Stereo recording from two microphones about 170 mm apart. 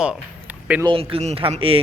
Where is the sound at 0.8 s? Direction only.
35° right (ahead or behind).